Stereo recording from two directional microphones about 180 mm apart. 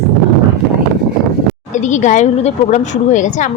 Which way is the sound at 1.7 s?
40° left (ahead or behind).